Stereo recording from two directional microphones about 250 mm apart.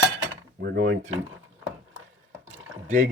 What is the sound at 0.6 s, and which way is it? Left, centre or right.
Speech, right.